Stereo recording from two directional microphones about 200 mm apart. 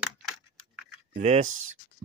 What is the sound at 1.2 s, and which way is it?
Speech, 35° right (ahead or behind).